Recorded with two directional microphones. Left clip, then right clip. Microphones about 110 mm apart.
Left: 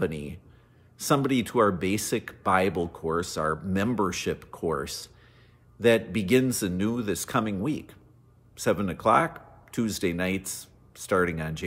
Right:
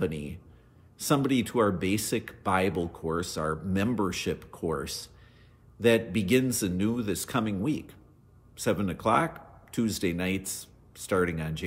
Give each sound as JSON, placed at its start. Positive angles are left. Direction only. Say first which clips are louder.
{"t": 0.0, "sound": "speech", "louder": "left 2 dB", "side_deg": 20}